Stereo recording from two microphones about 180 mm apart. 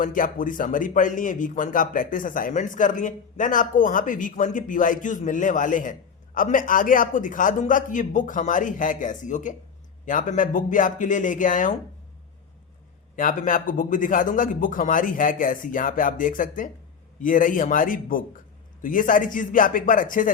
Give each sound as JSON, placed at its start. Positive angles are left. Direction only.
{"t": 0.0, "sound": "a man's voice", "side_deg": 50}
{"t": 13.1, "sound": "a man's voice", "side_deg": 50}